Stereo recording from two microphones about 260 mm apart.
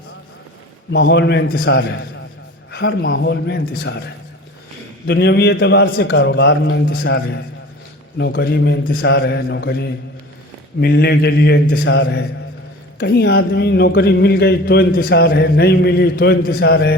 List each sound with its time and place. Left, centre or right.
0.9 s a man's voice: left
5.0 s a man's voice: left